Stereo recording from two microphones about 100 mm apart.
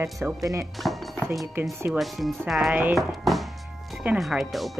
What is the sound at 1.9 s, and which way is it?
Speech, centre (ahead or behind).